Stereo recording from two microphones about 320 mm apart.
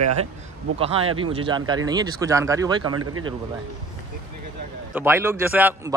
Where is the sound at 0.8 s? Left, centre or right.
Centre.